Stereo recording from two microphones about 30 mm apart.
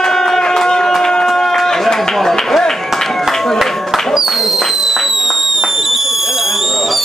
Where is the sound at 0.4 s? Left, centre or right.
Left.